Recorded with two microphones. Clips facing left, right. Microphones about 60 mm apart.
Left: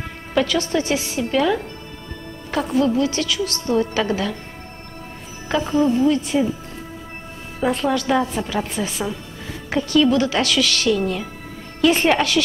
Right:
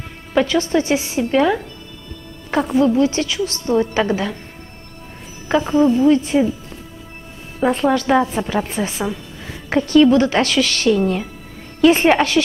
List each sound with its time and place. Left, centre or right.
0.3 s a woman's voice: right
2.7 s a woman's voice: right
5.5 s a woman's voice: right
7.7 s a woman's voice: right